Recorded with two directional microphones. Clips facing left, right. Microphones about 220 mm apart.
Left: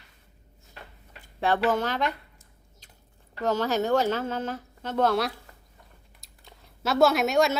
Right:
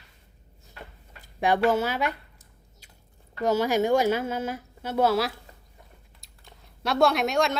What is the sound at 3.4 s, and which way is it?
A woman's voice, 10° right (ahead or behind).